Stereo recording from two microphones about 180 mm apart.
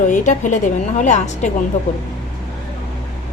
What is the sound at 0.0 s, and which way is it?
A woman's voice, 45° left (ahead or behind).